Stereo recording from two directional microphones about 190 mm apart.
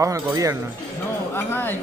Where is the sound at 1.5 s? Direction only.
10° left (ahead or behind).